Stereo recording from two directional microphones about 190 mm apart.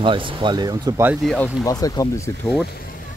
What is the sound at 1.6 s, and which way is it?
Speech, 20° left (ahead or behind).